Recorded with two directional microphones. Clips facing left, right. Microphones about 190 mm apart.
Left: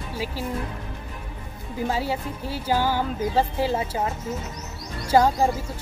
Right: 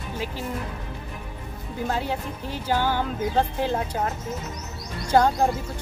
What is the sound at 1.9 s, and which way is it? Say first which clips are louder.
Speech: left 1 dB; 5° left (ahead or behind).